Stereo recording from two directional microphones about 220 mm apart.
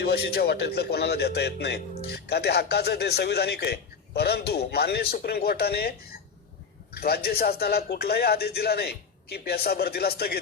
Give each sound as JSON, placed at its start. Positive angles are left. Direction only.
{"t": 0.0, "sound": "speech", "side_deg": 45}